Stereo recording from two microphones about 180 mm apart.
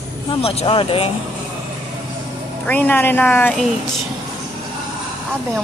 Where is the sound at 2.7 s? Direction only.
10° left (ahead or behind).